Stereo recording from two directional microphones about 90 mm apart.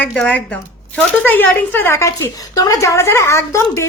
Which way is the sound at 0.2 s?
15° left (ahead or behind).